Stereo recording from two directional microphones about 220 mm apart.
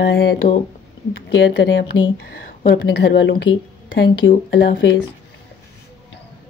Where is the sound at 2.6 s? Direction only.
45° left (ahead or behind).